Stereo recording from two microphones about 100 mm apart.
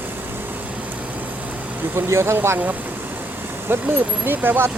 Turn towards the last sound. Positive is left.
turn(degrees=-20)  # may be behind; listen again after turning